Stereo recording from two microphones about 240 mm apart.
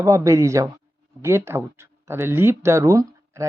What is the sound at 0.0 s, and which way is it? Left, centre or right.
Speech, centre.